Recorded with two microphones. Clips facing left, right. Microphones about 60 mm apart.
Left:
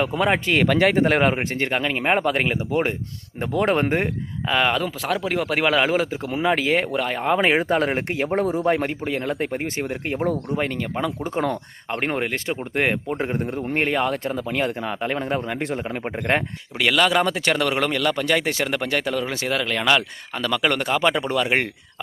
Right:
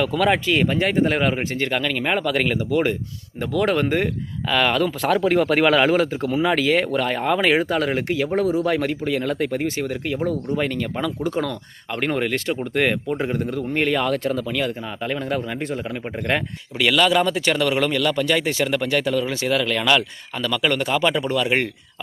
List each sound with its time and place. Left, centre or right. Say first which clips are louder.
0.0 s speech: right 2 dB; left
0.4 s speech: left 2 dB; left
1.4 s speech: even; left
4.5 s speech: right 2 dB; centre
5.0 s speech: right 7 dB; centre
6.1 s speech: right 1 dB; centre
7.3 s speech: left 1 dB; left
10.5 s speech: right 1 dB; centre
11.2 s speech: even; left
14.8 s speech: left 1 dB; left
15.5 s speech: even; left
15.8 s speech: even; left